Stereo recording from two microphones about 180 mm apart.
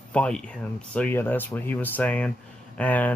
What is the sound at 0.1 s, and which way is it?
Speech, 5° left (ahead or behind).